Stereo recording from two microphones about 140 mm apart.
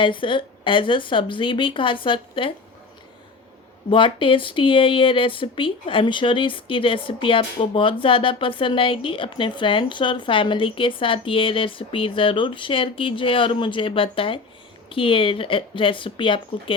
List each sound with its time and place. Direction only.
0.0 s speech: 35° left (ahead or behind)
3.8 s speech: 35° left (ahead or behind)